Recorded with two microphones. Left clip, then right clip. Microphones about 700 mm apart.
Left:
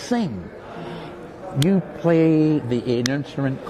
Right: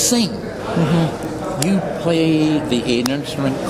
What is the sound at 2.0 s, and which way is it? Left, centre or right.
Speech, left.